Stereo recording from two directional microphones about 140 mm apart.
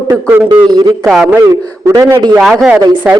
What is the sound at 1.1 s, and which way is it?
Speech, centre (ahead or behind).